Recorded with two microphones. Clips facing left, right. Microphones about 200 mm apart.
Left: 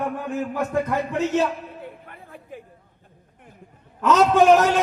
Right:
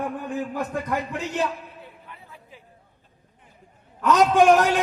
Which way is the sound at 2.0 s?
50° left (ahead or behind).